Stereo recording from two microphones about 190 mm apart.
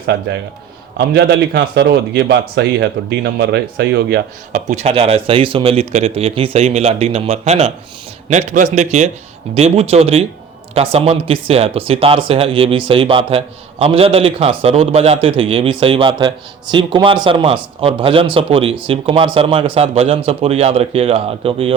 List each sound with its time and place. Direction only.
0.9 s a man's voice: 60° right (ahead or behind)
4.5 s a man's voice: 35° right (ahead or behind)